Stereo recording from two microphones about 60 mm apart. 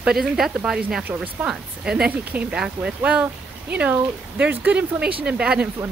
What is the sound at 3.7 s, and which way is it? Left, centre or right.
Speech, right.